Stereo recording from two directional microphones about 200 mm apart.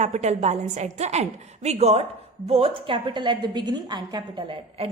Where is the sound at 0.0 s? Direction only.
35° right (ahead or behind).